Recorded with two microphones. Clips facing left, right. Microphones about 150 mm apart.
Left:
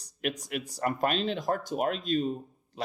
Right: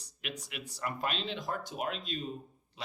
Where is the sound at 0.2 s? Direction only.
45° left (ahead or behind).